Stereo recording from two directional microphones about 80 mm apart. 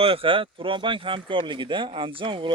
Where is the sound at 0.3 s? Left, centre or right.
Right.